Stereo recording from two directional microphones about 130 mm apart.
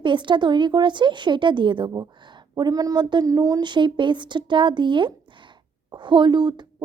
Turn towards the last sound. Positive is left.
turn(degrees=-35)  # may be behind; listen again after turning